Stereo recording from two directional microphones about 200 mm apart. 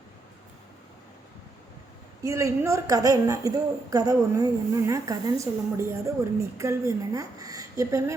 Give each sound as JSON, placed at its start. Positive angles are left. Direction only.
{"t": 2.2, "sound": "a woman's voice", "side_deg": -15}